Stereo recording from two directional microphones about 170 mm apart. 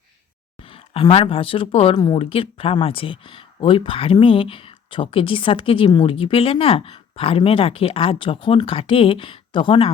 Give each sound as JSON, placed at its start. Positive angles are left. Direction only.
{"t": 0.7, "sound": "speech", "side_deg": 35}